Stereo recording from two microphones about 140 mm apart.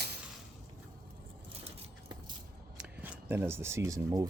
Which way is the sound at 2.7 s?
15° right (ahead or behind).